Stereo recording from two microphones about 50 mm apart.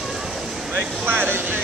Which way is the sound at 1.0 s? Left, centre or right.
Right.